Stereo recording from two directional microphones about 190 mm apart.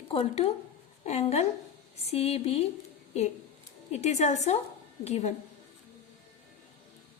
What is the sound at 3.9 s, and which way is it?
Speech, 35° left (ahead or behind).